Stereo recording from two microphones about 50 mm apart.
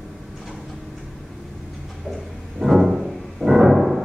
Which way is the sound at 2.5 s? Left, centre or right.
Centre.